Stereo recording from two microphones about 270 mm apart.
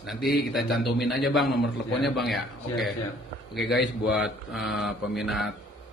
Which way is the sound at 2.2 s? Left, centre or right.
Centre.